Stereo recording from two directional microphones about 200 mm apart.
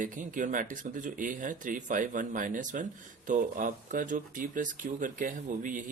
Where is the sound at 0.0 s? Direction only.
40° right (ahead or behind).